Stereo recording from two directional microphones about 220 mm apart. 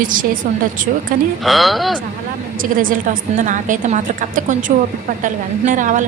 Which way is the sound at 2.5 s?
40° right (ahead or behind).